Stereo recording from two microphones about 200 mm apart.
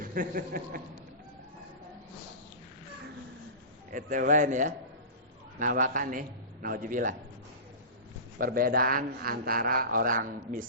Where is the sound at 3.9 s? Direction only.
40° right (ahead or behind).